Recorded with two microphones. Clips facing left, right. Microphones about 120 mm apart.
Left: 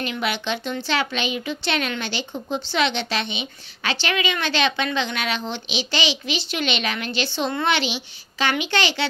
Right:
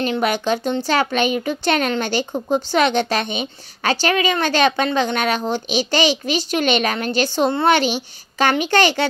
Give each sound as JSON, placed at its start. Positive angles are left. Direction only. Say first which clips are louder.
{"t": 0.0, "sound": "speech", "louder": "right 7 dB", "side_deg": -40}